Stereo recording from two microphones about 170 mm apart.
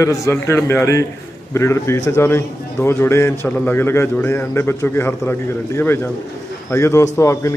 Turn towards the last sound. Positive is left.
turn(degrees=15)  # may be behind; listen again after turning